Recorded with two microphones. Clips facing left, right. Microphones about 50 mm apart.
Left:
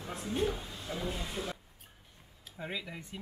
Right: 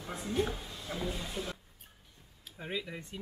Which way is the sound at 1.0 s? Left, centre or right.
Left.